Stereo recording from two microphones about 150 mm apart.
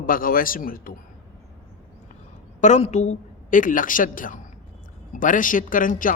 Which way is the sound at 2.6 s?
55° left (ahead or behind).